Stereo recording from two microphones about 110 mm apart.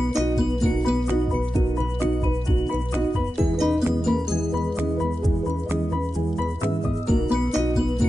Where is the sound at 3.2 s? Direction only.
5° right (ahead or behind).